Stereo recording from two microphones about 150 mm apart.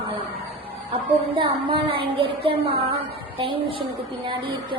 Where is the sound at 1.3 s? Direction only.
35° right (ahead or behind).